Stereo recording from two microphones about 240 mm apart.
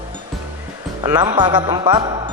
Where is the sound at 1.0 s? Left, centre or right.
Centre.